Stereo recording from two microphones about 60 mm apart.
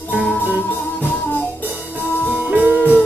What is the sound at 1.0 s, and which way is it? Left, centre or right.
Music, left.